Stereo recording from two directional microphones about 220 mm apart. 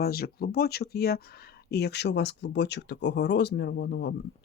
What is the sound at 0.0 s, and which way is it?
Speech, 45° left (ahead or behind).